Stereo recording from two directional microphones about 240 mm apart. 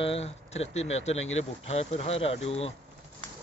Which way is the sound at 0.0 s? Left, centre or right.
Left.